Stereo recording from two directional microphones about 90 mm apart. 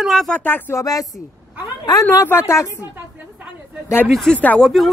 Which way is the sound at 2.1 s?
30° left (ahead or behind).